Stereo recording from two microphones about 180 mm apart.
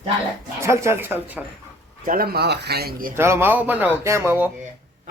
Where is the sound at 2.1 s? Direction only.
60° right (ahead or behind).